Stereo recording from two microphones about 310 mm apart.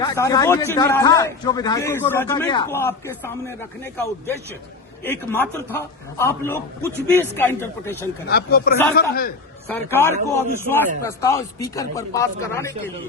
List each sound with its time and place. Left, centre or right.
0.0 s a man's voice: centre
5.0 s a man's voice: centre
8.3 s speech: left
9.7 s a man's voice: centre